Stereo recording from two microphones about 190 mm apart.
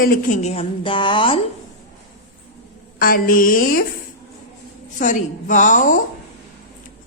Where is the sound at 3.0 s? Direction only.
50° left (ahead or behind).